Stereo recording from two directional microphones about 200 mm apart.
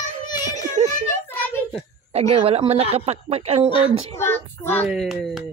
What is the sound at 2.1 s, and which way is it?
Speech, 30° right (ahead or behind).